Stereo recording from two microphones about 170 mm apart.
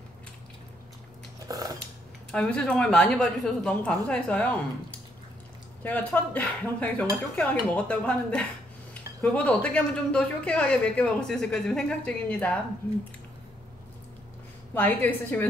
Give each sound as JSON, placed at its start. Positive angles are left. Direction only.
{"t": 1.5, "sound": "a sound", "side_deg": -20}
{"t": 2.3, "sound": "a woman's voice", "side_deg": 5}
{"t": 5.9, "sound": "speech", "side_deg": 10}
{"t": 14.7, "sound": "speech", "side_deg": 10}